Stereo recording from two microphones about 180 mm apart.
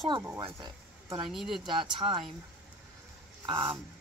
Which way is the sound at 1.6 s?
30° right (ahead or behind).